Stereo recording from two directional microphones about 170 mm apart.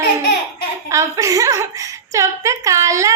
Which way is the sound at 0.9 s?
20° right (ahead or behind).